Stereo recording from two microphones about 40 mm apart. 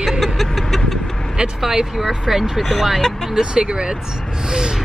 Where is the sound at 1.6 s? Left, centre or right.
Centre.